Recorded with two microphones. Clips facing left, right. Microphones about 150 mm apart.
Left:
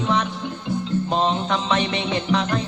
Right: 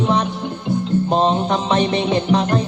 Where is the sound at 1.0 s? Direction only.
35° right (ahead or behind).